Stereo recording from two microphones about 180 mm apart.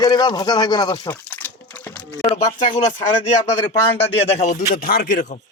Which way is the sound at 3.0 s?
40° left (ahead or behind).